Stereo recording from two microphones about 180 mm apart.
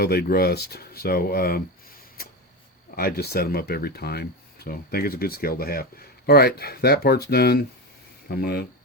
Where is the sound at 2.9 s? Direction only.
55° left (ahead or behind).